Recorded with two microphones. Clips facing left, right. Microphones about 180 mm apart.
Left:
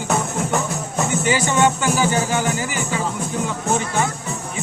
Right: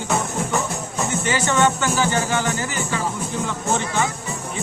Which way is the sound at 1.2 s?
10° left (ahead or behind).